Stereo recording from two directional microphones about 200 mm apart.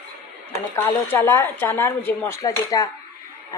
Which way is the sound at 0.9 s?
10° left (ahead or behind).